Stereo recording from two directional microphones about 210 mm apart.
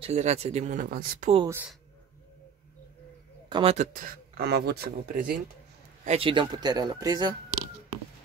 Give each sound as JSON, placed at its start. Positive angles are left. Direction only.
{"t": 0.0, "sound": "speech", "side_deg": -30}
{"t": 1.5, "sound": "speech", "side_deg": -10}
{"t": 3.4, "sound": "speech", "side_deg": -20}
{"t": 3.7, "sound": "speech", "side_deg": -35}
{"t": 6.0, "sound": "speech", "side_deg": -25}